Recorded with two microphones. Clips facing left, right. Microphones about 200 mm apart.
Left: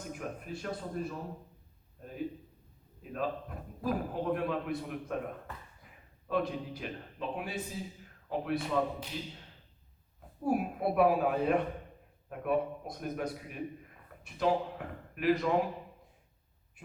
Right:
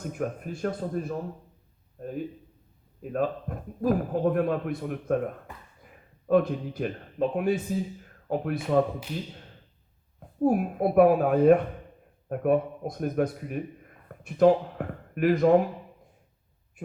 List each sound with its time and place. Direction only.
0.1 s a man's voice: 50° right (ahead or behind)
10.4 s a man's voice: 50° right (ahead or behind)